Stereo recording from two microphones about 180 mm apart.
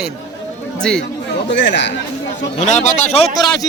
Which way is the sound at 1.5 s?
80° left.